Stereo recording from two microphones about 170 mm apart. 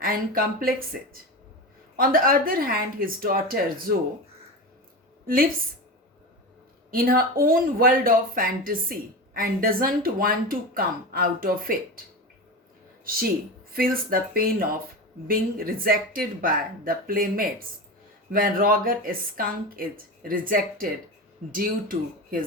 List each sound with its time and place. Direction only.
0.0 s speech: 60° right (ahead or behind)
2.0 s speech: 55° right (ahead or behind)
5.2 s a woman's voice: 55° right (ahead or behind)
6.9 s speech: 60° right (ahead or behind)
13.7 s speech: 60° right (ahead or behind)